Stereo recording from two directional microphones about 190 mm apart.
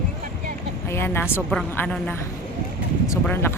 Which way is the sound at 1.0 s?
10° left (ahead or behind).